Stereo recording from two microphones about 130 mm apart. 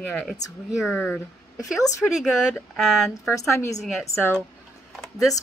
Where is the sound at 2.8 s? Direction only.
Centre (ahead or behind).